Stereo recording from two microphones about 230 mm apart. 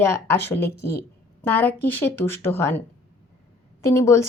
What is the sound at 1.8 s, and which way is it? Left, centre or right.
Speech, centre.